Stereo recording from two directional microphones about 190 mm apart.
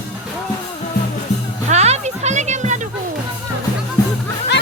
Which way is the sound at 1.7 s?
35° right (ahead or behind).